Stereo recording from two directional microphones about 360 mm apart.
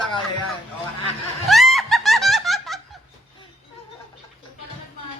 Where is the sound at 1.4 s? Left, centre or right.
Centre.